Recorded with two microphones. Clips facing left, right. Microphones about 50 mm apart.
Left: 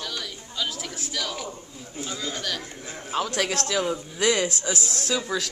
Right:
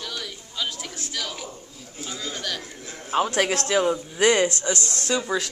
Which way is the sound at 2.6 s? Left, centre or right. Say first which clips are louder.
Left 1 dB; centre.